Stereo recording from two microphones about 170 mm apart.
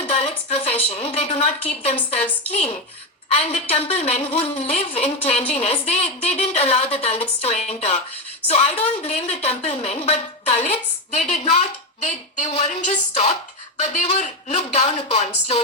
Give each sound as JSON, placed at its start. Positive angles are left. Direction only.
{"t": 0.1, "sound": "a woman's voice", "side_deg": 35}
{"t": 3.2, "sound": "a woman's voice", "side_deg": 40}